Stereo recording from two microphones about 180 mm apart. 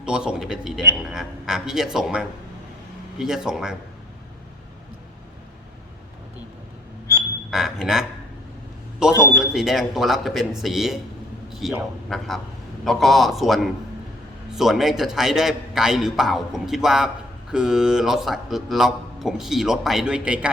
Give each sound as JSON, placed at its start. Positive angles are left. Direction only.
{"t": 0.0, "sound": "a man's voice", "side_deg": -5}
{"t": 7.5, "sound": "a man's voice", "side_deg": -5}
{"t": 9.1, "sound": "a man's voice", "side_deg": 15}
{"t": 9.4, "sound": "a man's voice", "side_deg": -5}